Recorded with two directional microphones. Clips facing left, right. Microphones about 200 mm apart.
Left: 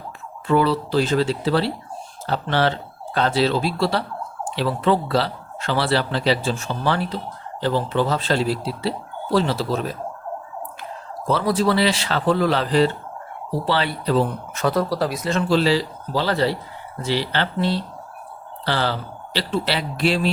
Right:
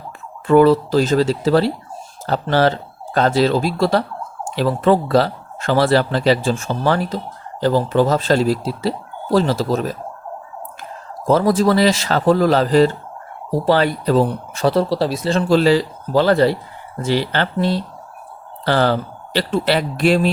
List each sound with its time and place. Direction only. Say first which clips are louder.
0.4 s speech: right 7 dB; 50° right (ahead or behind)
11.3 s speech: right 5 dB; 45° right (ahead or behind)
15.4 s speech: right 5 dB; 45° right (ahead or behind)